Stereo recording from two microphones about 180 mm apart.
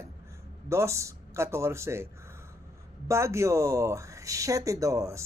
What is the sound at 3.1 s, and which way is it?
Speech, 15° right (ahead or behind).